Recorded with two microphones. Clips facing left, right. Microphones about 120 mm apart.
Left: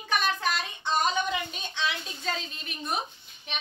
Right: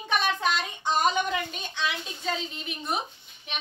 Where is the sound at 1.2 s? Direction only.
5° right (ahead or behind).